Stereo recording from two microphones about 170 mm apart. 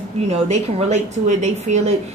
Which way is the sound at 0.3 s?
40° right (ahead or behind).